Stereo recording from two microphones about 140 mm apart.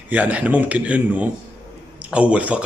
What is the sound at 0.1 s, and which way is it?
Speech, 10° right (ahead or behind).